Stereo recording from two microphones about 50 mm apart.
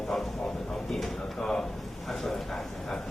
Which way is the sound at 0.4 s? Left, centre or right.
Centre.